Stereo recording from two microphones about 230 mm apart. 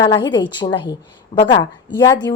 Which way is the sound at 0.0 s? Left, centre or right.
Centre.